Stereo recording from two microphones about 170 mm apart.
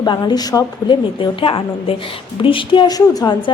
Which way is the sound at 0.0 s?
25° left (ahead or behind).